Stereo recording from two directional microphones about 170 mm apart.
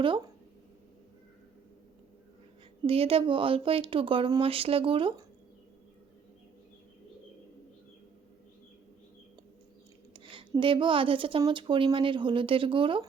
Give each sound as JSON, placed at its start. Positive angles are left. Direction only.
{"t": 2.8, "sound": "speech", "side_deg": -35}
{"t": 10.6, "sound": "speech", "side_deg": -30}